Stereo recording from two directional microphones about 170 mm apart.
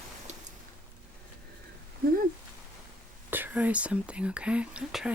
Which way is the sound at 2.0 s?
60° right (ahead or behind).